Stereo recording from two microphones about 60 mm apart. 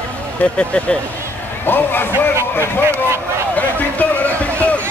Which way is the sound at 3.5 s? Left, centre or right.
Left.